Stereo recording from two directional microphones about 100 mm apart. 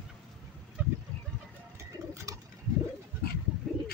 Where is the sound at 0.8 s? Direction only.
15° right (ahead or behind).